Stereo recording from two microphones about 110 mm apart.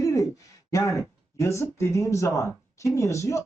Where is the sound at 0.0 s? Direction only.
30° left (ahead or behind).